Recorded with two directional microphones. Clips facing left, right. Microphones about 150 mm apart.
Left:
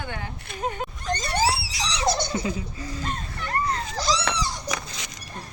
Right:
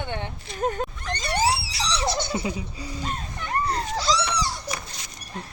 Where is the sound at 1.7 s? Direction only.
15° left (ahead or behind).